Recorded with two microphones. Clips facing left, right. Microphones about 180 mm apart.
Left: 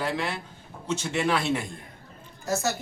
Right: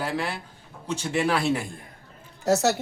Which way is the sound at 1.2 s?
35° right (ahead or behind).